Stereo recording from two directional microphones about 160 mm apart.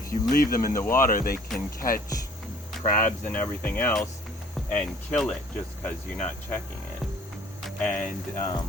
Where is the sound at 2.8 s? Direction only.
55° left (ahead or behind).